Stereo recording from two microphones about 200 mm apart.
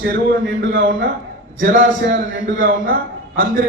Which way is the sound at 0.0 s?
45° right (ahead or behind).